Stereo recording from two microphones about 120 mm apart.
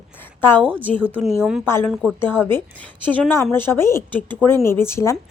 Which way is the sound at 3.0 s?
15° left (ahead or behind).